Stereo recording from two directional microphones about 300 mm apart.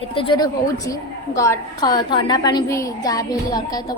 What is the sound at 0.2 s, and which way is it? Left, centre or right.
A woman's voice, centre.